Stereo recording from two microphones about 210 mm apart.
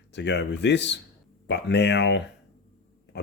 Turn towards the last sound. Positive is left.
turn(degrees=55)  # may be behind; listen again after turning